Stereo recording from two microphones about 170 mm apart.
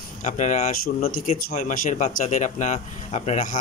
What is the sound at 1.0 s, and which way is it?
Speech, 55° left (ahead or behind).